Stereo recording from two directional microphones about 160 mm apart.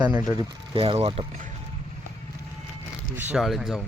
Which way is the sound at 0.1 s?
20° right (ahead or behind).